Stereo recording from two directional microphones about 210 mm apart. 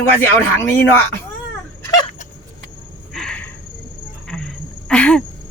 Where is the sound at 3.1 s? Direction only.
5° left (ahead or behind).